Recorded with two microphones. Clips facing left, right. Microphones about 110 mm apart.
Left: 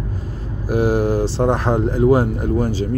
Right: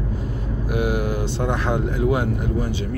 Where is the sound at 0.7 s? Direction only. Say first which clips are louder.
Left 6 dB; 35° left (ahead or behind).